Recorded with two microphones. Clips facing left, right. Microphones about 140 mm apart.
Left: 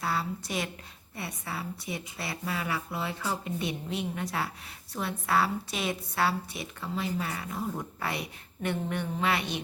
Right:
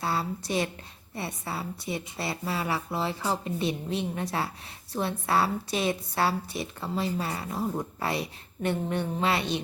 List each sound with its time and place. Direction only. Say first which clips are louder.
0.0 s a woman's voice: right 2 dB; 35° right (ahead or behind)